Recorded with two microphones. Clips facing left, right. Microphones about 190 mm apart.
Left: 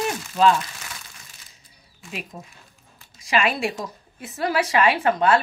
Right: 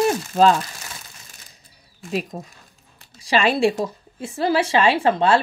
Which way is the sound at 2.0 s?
40° right (ahead or behind).